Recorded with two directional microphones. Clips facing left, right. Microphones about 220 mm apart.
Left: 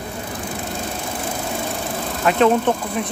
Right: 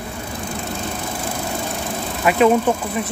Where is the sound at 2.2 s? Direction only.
5° right (ahead or behind).